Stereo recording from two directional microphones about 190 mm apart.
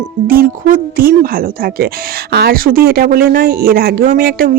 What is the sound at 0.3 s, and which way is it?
Speech, 50° right (ahead or behind).